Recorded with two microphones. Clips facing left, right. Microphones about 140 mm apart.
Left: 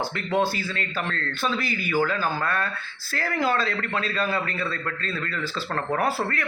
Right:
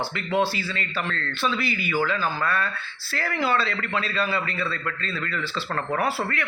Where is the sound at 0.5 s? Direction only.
45° left (ahead or behind).